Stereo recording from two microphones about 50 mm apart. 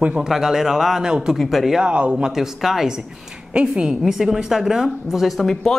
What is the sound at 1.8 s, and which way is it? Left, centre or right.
Speech, centre.